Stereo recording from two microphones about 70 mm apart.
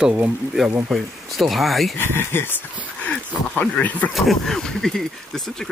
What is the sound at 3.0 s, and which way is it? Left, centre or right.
Speech, left.